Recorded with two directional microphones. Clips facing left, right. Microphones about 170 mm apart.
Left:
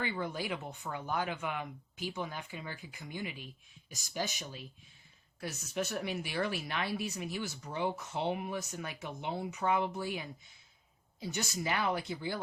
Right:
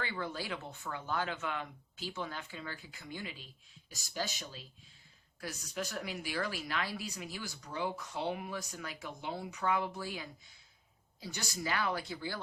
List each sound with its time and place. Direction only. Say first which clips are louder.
0.0 s speech: left 3 dB; 20° left (ahead or behind)